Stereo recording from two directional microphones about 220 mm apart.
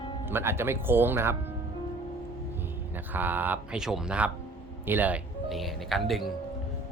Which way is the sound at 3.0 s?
10° right (ahead or behind).